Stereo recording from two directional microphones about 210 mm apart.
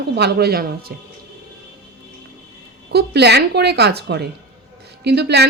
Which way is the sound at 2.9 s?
50° right (ahead or behind).